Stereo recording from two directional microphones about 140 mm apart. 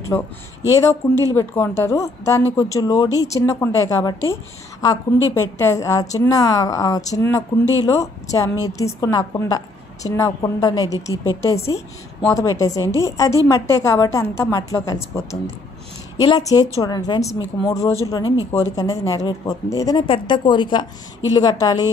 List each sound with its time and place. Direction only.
0.1 s speech: 20° left (ahead or behind)
16.2 s speech: 25° left (ahead or behind)